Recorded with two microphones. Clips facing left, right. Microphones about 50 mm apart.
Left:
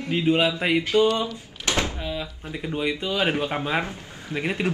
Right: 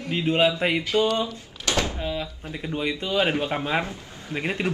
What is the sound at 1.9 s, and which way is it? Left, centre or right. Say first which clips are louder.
Speech: right 1 dB; centre.